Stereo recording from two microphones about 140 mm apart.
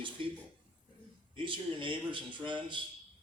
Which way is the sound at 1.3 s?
35° right (ahead or behind).